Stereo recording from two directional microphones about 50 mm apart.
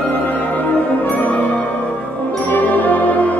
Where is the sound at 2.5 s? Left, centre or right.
Left.